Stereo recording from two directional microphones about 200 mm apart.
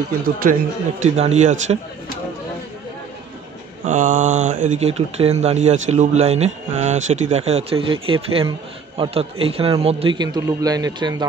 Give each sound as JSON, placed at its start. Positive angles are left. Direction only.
{"t": 0.2, "sound": "speech", "side_deg": -45}
{"t": 3.8, "sound": "speech", "side_deg": -40}